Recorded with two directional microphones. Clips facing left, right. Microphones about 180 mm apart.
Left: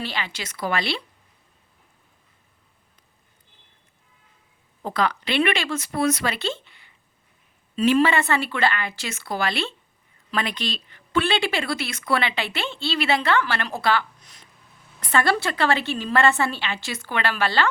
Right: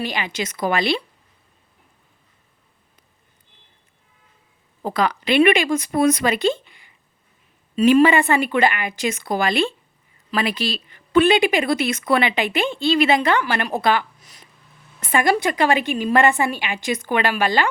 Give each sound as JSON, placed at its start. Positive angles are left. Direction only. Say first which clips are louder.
{"t": 0.0, "sound": "speech", "louder": "right 5 dB", "side_deg": -15}
{"t": 4.9, "sound": "speech", "louder": "right 5 dB", "side_deg": -15}
{"t": 14.2, "sound": "a sound", "louder": "right 2 dB", "side_deg": -5}
{"t": 15.0, "sound": "speech", "louder": "right 3 dB", "side_deg": -15}